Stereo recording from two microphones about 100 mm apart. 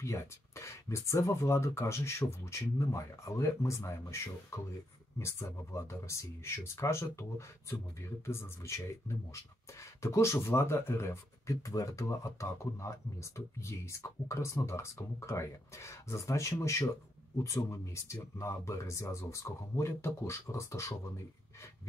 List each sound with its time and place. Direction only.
0.0 s speech: 30° left (ahead or behind)
10.0 s speech: 25° left (ahead or behind)